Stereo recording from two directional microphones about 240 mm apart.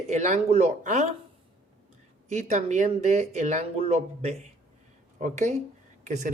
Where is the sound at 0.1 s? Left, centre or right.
Right.